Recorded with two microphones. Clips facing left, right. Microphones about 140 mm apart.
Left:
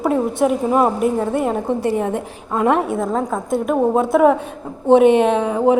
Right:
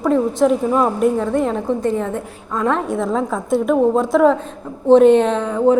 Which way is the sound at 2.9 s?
5° left (ahead or behind).